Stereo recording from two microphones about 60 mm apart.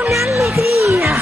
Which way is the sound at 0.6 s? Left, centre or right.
Right.